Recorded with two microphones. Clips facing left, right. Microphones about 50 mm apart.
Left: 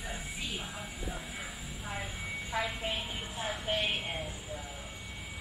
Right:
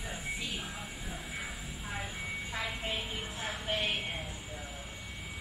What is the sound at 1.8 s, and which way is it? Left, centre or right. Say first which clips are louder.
Vehicle: even; centre.